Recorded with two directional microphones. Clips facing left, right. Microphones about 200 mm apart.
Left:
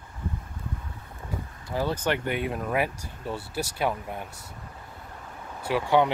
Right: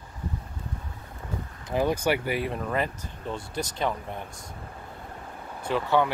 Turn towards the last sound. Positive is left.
turn(degrees=15)  # may be behind; listen again after turning